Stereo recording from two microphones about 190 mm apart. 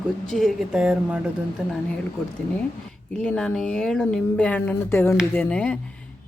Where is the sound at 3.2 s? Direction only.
5° left (ahead or behind).